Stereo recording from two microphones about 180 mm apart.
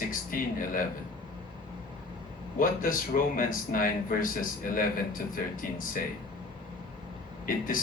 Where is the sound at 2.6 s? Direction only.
50° left (ahead or behind).